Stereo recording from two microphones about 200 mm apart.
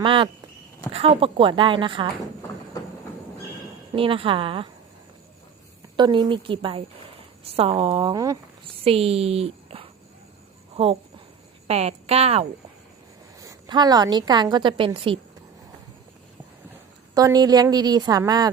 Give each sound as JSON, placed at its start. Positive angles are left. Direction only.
{"t": 0.0, "sound": "a woman's voice", "side_deg": -25}
{"t": 3.9, "sound": "a woman's voice", "side_deg": -25}
{"t": 6.0, "sound": "a woman's voice", "side_deg": -20}
{"t": 8.8, "sound": "a woman's voice", "side_deg": -30}
{"t": 11.7, "sound": "a woman's voice", "side_deg": -30}
{"t": 13.4, "sound": "a woman's voice", "side_deg": -20}
{"t": 17.2, "sound": "a woman's voice", "side_deg": -20}